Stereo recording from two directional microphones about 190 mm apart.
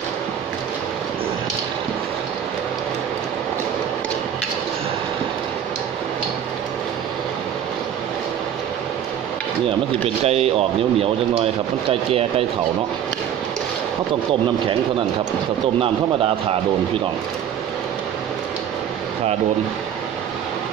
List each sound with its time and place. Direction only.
9.7 s speech: 30° right (ahead or behind)
11.9 s speech: 30° right (ahead or behind)